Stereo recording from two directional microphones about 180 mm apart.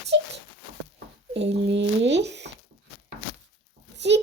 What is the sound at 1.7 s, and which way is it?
Speech, 75° right (ahead or behind).